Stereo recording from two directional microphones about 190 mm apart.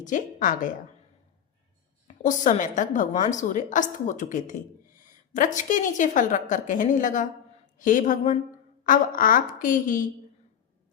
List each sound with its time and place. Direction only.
0.0 s a woman's voice: 45° left (ahead or behind)
2.0 s a woman's voice: 40° left (ahead or behind)